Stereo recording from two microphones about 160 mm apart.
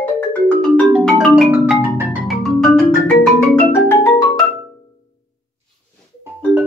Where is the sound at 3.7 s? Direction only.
15° left (ahead or behind).